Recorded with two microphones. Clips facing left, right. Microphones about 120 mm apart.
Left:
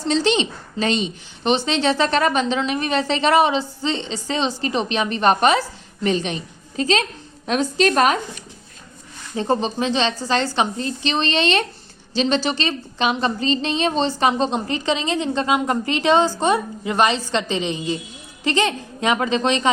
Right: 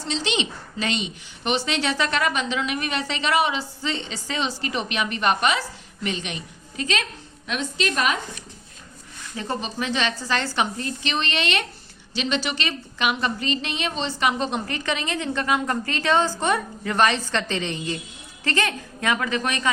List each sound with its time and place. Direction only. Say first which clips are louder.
0.1 s a woman's voice: left 7 dB; 35° left (ahead or behind)
9.3 s a woman's voice: left 8 dB; 30° left (ahead or behind)